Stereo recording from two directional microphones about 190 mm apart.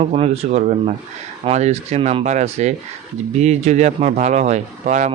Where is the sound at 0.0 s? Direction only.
35° right (ahead or behind).